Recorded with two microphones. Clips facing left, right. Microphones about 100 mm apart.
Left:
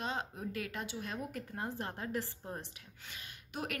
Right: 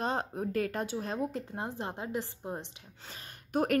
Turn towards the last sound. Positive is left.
turn(degrees=-45)  # may be behind; listen again after turning